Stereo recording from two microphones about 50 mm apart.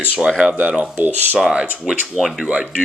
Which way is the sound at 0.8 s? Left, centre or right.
Right.